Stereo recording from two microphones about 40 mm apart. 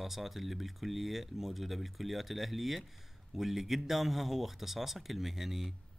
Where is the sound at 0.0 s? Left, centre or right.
Centre.